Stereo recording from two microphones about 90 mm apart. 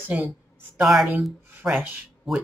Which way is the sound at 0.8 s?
5° right (ahead or behind).